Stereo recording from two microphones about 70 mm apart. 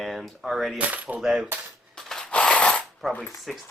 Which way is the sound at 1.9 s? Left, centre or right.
Centre.